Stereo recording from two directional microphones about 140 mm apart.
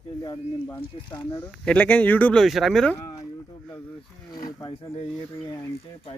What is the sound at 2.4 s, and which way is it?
Speech, centre (ahead or behind).